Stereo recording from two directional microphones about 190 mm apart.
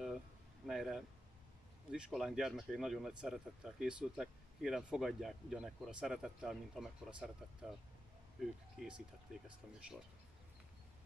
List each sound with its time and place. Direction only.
0.7 s speech: centre (ahead or behind)